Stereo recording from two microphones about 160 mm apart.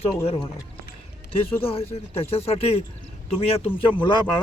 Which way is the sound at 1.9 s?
40° left (ahead or behind).